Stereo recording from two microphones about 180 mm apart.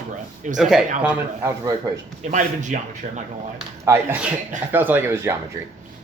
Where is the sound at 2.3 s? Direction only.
45° right (ahead or behind).